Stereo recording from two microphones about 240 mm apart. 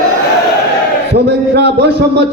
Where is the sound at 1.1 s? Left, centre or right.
Right.